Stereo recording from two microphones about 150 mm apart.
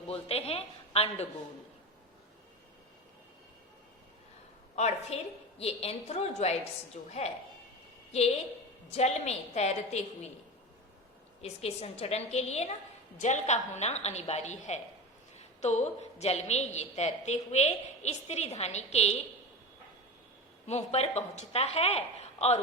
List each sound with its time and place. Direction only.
0.1 s a woman's voice: 40° left (ahead or behind)
4.7 s a woman's voice: 50° left (ahead or behind)
8.9 s a woman's voice: 45° left (ahead or behind)
11.4 s a woman's voice: 45° left (ahead or behind)
20.7 s a woman's voice: 45° left (ahead or behind)